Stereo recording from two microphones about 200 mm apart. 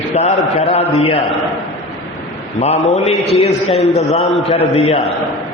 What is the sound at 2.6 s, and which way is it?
Speech, 30° left (ahead or behind).